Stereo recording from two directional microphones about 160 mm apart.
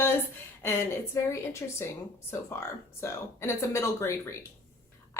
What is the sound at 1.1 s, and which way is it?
Speech, 15° left (ahead or behind).